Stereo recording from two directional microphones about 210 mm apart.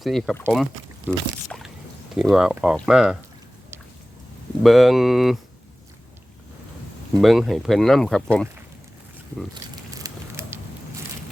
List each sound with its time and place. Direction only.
0.0 s speech: centre (ahead or behind)
4.6 s speech: centre (ahead or behind)
7.2 s speech: centre (ahead or behind)
9.7 s a sound: 15° right (ahead or behind)